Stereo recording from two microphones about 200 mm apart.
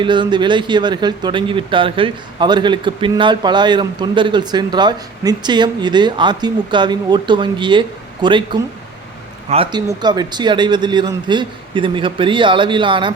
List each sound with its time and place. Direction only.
0.0 s speech: 25° right (ahead or behind)
9.5 s speech: 25° right (ahead or behind)